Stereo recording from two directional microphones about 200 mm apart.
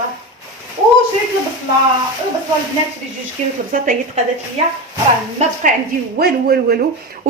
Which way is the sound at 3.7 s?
40° right (ahead or behind).